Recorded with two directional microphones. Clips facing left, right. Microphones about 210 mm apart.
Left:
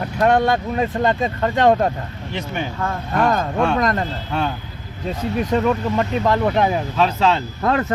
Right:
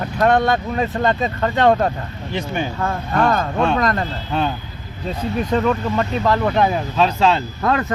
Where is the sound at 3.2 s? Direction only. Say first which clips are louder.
Even; 10° left (ahead or behind).